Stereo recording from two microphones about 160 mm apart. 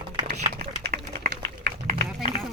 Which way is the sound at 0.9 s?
65° right (ahead or behind).